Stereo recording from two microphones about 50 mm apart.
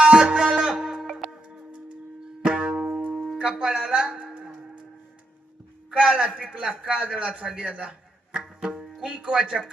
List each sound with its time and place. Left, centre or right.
0.0 s music: centre
2.4 s music: right
6.1 s a man's voice: centre